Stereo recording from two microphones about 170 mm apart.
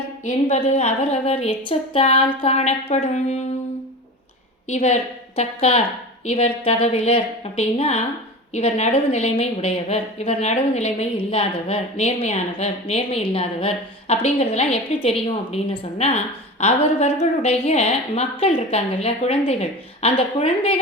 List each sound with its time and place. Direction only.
0.3 s a woman's voice: 40° left (ahead or behind)
4.7 s a woman's voice: 40° left (ahead or behind)